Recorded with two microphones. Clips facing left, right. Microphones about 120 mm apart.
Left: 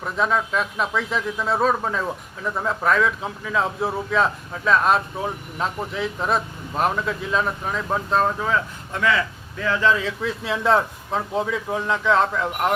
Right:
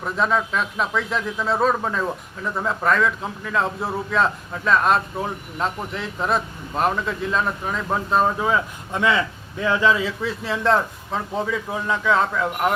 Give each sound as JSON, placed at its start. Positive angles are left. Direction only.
{"t": 0.0, "sound": "a man's voice", "side_deg": 0}